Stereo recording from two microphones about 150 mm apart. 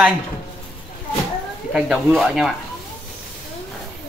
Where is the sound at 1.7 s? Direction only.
5° right (ahead or behind).